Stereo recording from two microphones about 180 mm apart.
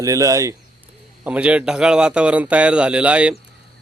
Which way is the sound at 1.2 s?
5° right (ahead or behind).